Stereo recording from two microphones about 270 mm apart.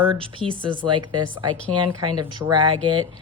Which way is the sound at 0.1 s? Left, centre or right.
Centre.